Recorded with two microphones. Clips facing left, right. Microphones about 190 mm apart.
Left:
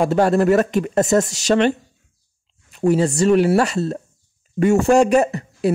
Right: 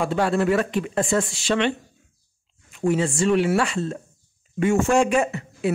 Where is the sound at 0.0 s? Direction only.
40° left (ahead or behind).